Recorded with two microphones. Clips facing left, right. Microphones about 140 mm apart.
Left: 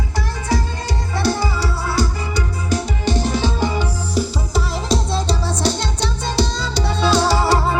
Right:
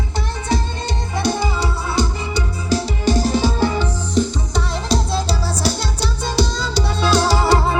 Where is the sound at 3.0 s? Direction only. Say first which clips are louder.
Right 3 dB; 40° right (ahead or behind).